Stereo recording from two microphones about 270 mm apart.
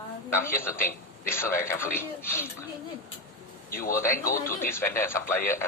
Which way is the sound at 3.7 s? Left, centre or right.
Left.